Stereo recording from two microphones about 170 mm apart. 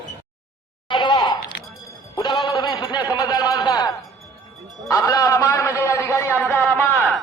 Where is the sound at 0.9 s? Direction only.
25° left (ahead or behind); by 6.9 s 10° left (ahead or behind).